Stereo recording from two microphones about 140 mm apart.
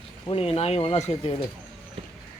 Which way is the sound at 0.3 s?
45° left (ahead or behind).